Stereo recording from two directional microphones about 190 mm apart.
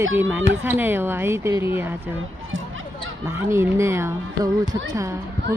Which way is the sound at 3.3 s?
15° right (ahead or behind).